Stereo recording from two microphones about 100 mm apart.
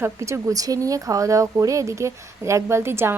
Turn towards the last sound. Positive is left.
turn(degrees=-25)  # may be behind; listen again after turning